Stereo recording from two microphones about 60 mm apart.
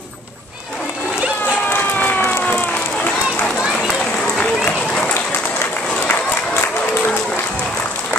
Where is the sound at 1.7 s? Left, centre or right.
Left.